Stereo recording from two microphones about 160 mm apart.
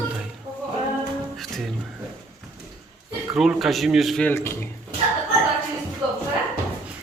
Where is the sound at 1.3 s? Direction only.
Centre (ahead or behind).